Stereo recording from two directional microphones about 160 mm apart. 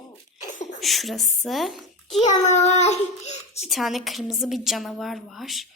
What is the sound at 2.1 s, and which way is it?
A child's voice, 45° left (ahead or behind).